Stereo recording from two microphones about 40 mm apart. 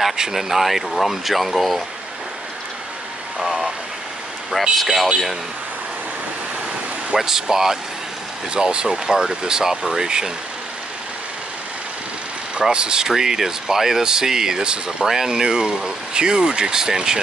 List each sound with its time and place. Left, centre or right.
0.3 s speech: centre
3.3 s vehicle: centre
4.5 s speech: centre
7.2 s speech: centre
12.5 s speech: right
13.1 s speech: centre